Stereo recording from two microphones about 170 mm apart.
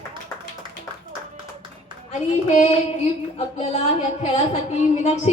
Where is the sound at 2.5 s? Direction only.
45° left (ahead or behind).